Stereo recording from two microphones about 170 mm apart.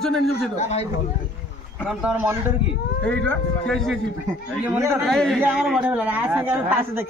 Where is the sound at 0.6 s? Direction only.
40° left (ahead or behind).